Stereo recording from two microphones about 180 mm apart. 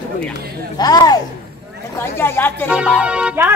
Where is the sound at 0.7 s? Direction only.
20° left (ahead or behind).